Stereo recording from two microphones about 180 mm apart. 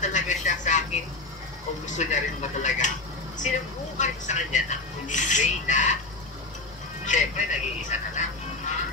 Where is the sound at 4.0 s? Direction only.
40° left (ahead or behind).